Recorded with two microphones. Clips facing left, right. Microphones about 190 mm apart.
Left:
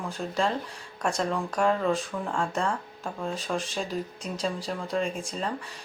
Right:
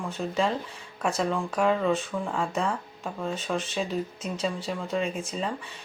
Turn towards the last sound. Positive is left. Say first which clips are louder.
# right 1 dB
turn(degrees=-5)  # may be behind; listen again after turning